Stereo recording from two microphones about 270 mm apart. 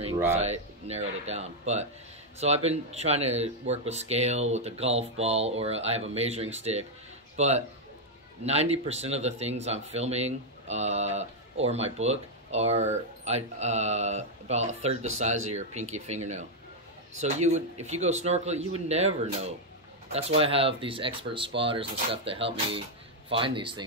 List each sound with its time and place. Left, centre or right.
0.4 s a man's voice: right